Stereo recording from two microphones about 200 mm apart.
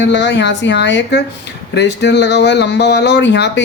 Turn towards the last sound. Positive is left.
turn(degrees=60)  # may be behind; listen again after turning